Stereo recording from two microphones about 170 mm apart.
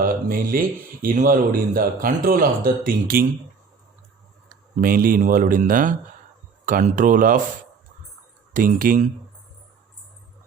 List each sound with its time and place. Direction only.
0.0 s speech: 60° right (ahead or behind)
4.8 s speech: 55° right (ahead or behind)
8.5 s speech: 55° right (ahead or behind)